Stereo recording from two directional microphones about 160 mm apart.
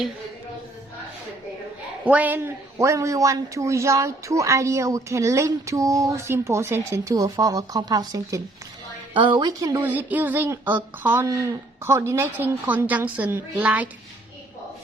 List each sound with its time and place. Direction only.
2.0 s speech: 10° right (ahead or behind)